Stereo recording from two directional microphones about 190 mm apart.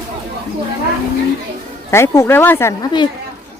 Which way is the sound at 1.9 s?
15° left (ahead or behind).